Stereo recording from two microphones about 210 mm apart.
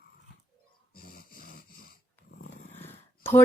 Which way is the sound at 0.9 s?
45° left (ahead or behind).